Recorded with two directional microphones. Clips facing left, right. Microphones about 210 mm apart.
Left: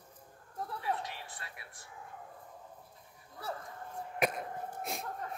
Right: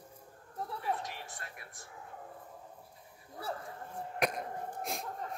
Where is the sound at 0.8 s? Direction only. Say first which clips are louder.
Even; 45° right (ahead or behind).